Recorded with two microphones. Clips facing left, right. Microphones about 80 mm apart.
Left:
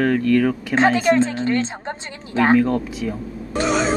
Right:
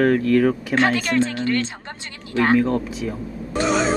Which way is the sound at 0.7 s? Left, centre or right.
Left.